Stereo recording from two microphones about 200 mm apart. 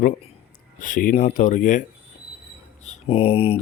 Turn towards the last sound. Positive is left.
turn(degrees=30)  # may be behind; listen again after turning